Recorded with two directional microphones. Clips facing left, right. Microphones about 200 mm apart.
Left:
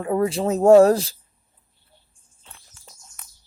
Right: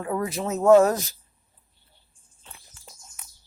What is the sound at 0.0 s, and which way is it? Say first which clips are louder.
Speech: left 6 dB; 30° left (ahead or behind).